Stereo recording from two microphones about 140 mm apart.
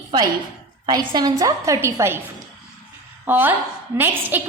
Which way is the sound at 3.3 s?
15° right (ahead or behind).